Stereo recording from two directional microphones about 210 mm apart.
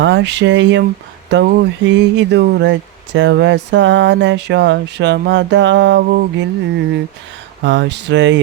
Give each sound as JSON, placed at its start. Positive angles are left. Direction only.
{"t": 0.0, "sound": "speech", "side_deg": -60}
{"t": 7.6, "sound": "speech", "side_deg": -60}